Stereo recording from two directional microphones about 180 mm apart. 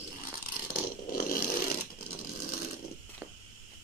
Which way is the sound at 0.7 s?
55° left (ahead or behind).